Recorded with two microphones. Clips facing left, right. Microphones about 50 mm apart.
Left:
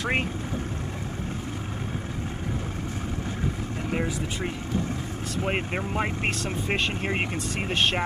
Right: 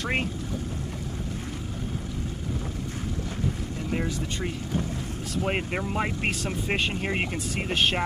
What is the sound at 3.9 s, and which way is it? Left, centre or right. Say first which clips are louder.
Speech: left 1 dB; centre.